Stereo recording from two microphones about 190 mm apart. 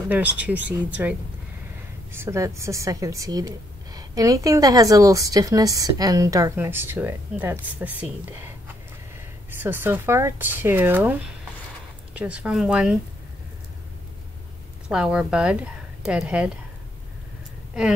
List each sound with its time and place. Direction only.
0.1 s a woman's voice: 10° right (ahead or behind)
2.1 s a woman's voice: 15° right (ahead or behind)
9.5 s a woman's voice: 10° right (ahead or behind)
14.9 s speech: 5° right (ahead or behind)